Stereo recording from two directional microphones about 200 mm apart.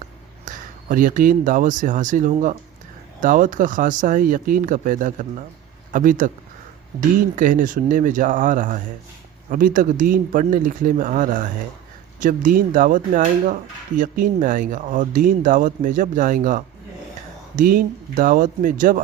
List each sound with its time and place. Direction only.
0.4 s speech: 40° right (ahead or behind)
7.3 s speech: 40° right (ahead or behind)